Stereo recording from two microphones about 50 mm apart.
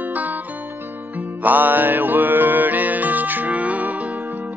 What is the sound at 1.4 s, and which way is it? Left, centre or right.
Music, right.